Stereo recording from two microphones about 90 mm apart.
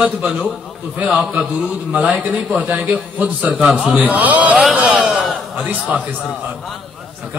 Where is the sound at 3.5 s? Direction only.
Centre (ahead or behind).